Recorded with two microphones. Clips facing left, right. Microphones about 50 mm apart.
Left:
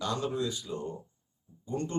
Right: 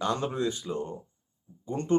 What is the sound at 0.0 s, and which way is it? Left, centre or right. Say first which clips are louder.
Speech: right 3 dB; right.